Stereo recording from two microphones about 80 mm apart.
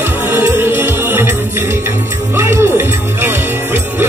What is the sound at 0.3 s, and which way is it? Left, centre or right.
Music, right.